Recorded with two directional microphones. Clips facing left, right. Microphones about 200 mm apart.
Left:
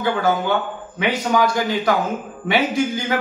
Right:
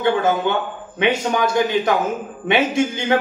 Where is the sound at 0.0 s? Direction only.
25° right (ahead or behind).